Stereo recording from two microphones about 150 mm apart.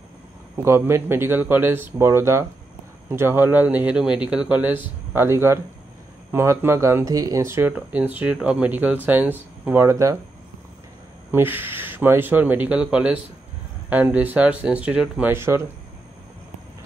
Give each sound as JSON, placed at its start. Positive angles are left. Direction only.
{"t": 0.7, "sound": "speech", "side_deg": -15}
{"t": 11.3, "sound": "speech", "side_deg": -15}